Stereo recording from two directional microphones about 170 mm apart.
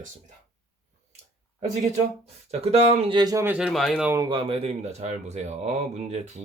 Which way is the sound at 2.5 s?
40° right (ahead or behind).